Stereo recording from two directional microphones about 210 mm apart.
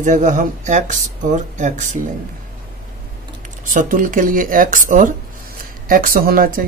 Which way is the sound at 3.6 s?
40° right (ahead or behind).